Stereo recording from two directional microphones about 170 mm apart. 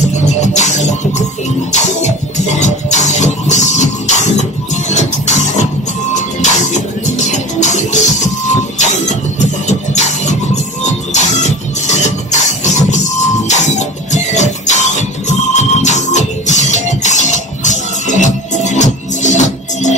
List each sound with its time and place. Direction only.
0.2 s music: 45° left (ahead or behind)
8.7 s vehicle: 45° left (ahead or behind)
9.7 s music: 45° left (ahead or behind)